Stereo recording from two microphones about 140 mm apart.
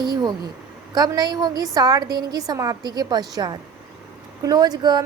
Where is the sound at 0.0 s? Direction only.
30° right (ahead or behind).